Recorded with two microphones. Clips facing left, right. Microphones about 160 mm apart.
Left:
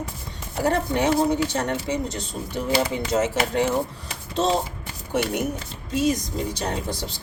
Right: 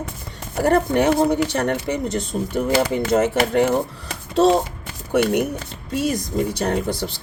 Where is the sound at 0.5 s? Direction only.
55° right (ahead or behind).